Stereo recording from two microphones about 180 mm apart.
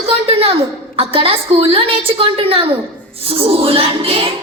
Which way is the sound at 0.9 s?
30° right (ahead or behind).